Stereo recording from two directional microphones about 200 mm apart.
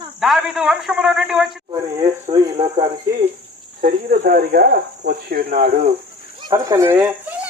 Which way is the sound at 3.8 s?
45° right (ahead or behind).